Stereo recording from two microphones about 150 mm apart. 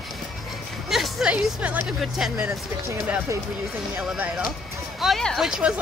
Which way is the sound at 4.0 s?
5° right (ahead or behind).